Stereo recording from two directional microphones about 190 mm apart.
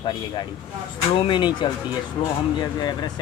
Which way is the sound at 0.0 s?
25° left (ahead or behind).